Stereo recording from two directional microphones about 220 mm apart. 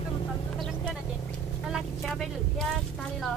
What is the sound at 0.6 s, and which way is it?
Vehicle, centre (ahead or behind).